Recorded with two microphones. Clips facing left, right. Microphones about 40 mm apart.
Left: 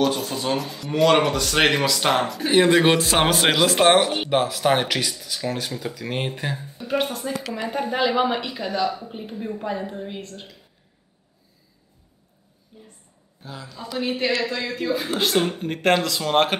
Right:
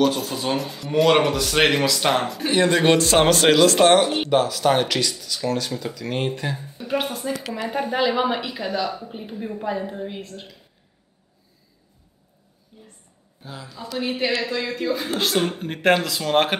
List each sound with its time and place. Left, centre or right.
0.0 s a woman's voice: centre
2.5 s speech: centre
6.8 s a woman's voice: centre
12.7 s a sound: centre
13.4 s a woman's voice: centre